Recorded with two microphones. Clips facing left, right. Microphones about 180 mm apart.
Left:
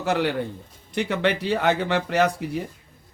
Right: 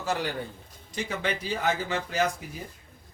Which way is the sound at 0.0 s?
65° left (ahead or behind).